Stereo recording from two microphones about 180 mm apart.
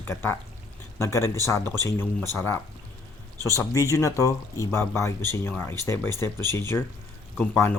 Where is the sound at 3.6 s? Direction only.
15° left (ahead or behind).